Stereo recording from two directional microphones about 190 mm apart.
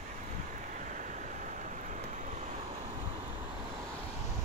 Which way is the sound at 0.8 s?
40° right (ahead or behind).